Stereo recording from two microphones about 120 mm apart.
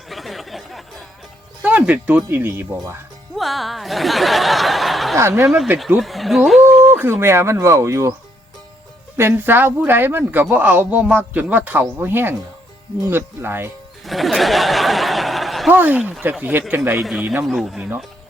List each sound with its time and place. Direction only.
0.1 s a sound: centre (ahead or behind)
1.6 s speech: 15° right (ahead or behind)
3.3 s speech: centre (ahead or behind)
5.1 s speech: 25° right (ahead or behind)
6.0 s speech: centre (ahead or behind); by 8.1 s 25° right (ahead or behind)
9.1 s speech: 20° right (ahead or behind)
14.0 s a sound: centre (ahead or behind)
15.7 s speech: 15° right (ahead or behind)
17.0 s speech: 5° right (ahead or behind)